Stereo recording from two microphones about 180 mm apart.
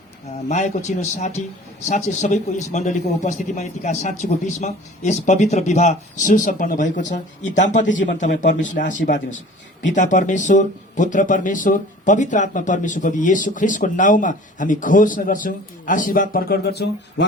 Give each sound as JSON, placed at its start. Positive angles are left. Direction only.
{"t": 0.4, "sound": "speech", "side_deg": 40}